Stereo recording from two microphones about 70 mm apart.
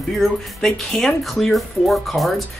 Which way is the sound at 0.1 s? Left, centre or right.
Centre.